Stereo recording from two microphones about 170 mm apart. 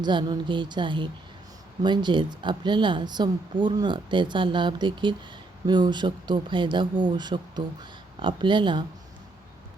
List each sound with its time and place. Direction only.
0.0 s speech: 25° right (ahead or behind)